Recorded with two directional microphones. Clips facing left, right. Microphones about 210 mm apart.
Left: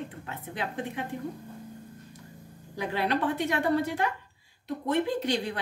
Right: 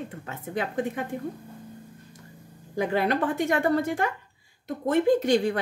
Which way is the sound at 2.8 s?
50° right (ahead or behind).